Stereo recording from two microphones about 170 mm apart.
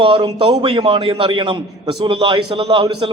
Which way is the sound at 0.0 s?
30° right (ahead or behind).